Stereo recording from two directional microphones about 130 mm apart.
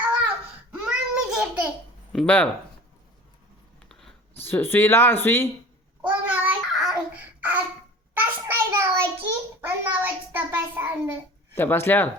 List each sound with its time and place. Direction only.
0.7 s child singing: 5° right (ahead or behind)
2.1 s speech: 10° left (ahead or behind)
4.4 s speech: 15° left (ahead or behind)
6.0 s babbling: 10° right (ahead or behind)
8.1 s a sound: 15° right (ahead or behind)
11.5 s speech: 15° left (ahead or behind)